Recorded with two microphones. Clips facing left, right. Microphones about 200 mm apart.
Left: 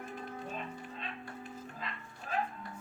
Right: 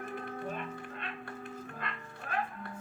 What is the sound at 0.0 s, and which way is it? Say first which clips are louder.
Music: right 4 dB; 60° right (ahead or behind).